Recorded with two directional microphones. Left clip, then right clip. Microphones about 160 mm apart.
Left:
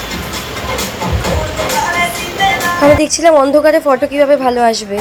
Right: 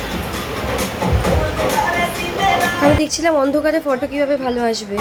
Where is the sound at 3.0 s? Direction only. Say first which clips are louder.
Left 7 dB; 20° left (ahead or behind).